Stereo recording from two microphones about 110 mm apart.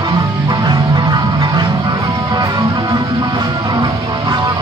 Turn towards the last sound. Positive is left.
turn(degrees=-40)  # may be behind; listen again after turning